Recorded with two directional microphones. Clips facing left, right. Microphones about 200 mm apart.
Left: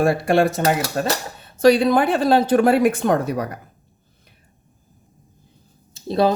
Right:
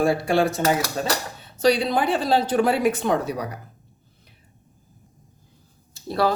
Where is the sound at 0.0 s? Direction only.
60° left (ahead or behind).